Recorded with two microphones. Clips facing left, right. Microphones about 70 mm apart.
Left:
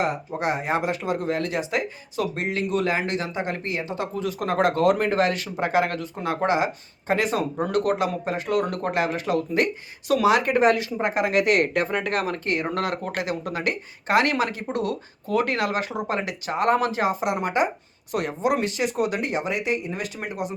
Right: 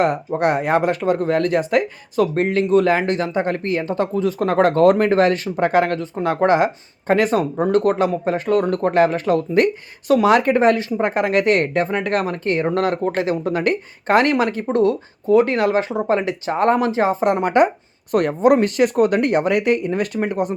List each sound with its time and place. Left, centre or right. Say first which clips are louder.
0.3 s speech: right 7 dB; right
7.5 s speech: right 6 dB; right